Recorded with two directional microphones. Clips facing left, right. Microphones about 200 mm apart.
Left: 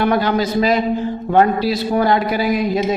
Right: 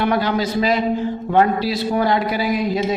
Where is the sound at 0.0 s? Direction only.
45° left (ahead or behind).